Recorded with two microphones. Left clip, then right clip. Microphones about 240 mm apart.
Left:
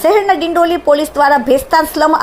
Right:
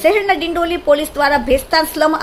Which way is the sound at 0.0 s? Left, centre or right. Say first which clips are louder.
Left 3 dB; centre.